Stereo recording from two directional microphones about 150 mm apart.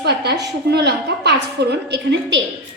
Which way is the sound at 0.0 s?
90° right.